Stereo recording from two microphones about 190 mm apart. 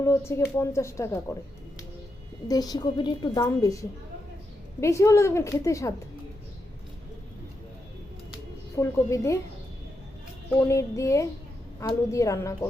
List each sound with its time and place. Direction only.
0.0 s a woman's voice: 15° left (ahead or behind)
2.5 s a woman's voice: 20° left (ahead or behind)
8.7 s a woman's voice: 15° left (ahead or behind)
10.6 s a woman's voice: 15° left (ahead or behind)